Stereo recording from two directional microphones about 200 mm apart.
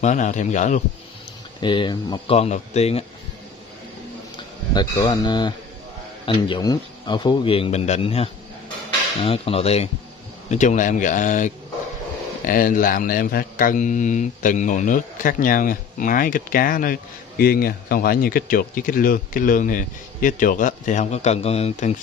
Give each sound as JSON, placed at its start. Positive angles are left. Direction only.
{"t": 0.0, "sound": "a man's voice", "side_deg": 40}
{"t": 1.6, "sound": "speech", "side_deg": 25}
{"t": 2.3, "sound": "a man's voice", "side_deg": 35}
{"t": 4.7, "sound": "a man's voice", "side_deg": 20}